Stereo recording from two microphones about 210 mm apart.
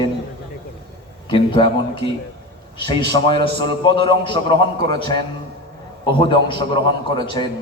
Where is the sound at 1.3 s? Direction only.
25° left (ahead or behind).